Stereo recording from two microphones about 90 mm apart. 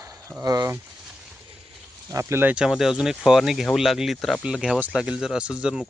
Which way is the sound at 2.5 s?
5° right (ahead or behind).